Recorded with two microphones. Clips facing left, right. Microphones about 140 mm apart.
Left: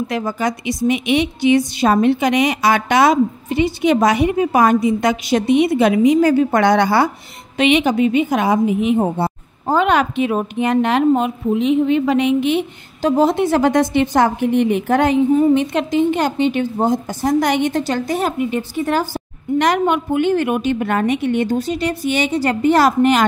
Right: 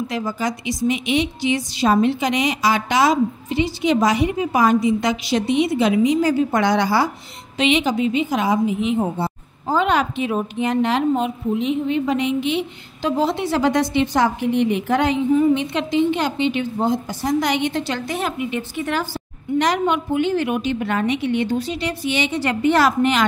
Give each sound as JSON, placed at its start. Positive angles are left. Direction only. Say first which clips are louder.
{"t": 0.1, "sound": "a woman's voice", "louder": "left 3 dB", "side_deg": 60}
{"t": 19.6, "sound": "a woman's voice", "louder": "left 3 dB", "side_deg": 55}